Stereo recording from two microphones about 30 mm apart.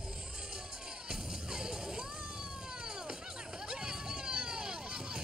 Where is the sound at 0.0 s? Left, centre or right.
Centre.